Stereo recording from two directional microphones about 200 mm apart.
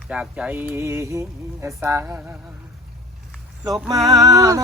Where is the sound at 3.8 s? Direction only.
15° right (ahead or behind).